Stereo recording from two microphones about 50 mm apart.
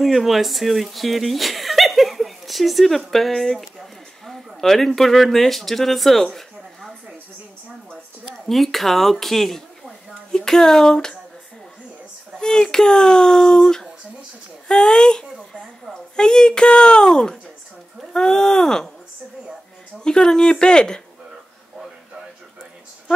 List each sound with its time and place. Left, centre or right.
0.0 s speech: centre
8.3 s a woman's voice: centre
12.4 s speech: centre
15.3 s a sound: centre
15.9 s speech: centre
20.0 s speech: centre